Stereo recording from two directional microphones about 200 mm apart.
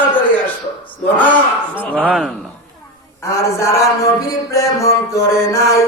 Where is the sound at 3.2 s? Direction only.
15° left (ahead or behind).